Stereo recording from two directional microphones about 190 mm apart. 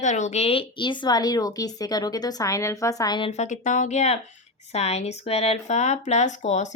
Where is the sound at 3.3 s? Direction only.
40° left (ahead or behind).